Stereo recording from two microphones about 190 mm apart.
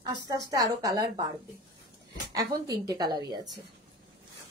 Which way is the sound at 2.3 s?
20° right (ahead or behind).